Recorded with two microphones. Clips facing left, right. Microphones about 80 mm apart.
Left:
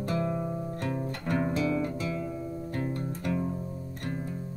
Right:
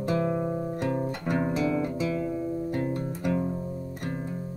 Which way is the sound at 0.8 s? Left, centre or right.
Right.